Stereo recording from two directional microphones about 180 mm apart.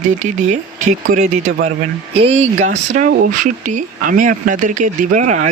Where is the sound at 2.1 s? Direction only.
30° right (ahead or behind).